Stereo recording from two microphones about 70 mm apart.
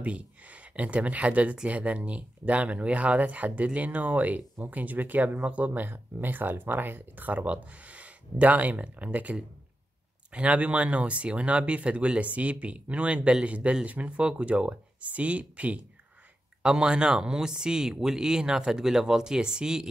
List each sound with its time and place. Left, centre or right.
0.0 s speech: centre